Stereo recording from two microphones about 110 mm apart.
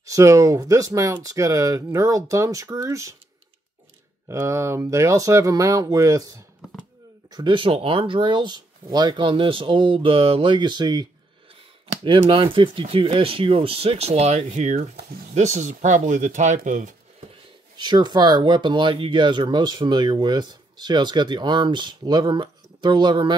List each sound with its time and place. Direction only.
0.0 s speech: 30° right (ahead or behind)
4.3 s speech: 25° right (ahead or behind); by 16.5 s 90° right
17.7 s speech: 40° right (ahead or behind)